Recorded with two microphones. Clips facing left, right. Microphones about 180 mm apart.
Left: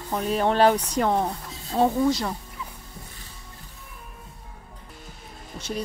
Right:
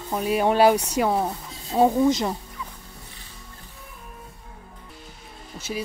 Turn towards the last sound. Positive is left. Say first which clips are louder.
# even
turn(degrees=-5)  # may be behind; listen again after turning